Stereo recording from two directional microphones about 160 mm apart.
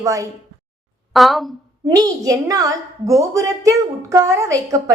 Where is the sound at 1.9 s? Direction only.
20° right (ahead or behind).